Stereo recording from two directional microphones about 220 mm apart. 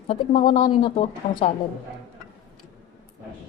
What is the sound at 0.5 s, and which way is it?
Speech, 20° left (ahead or behind).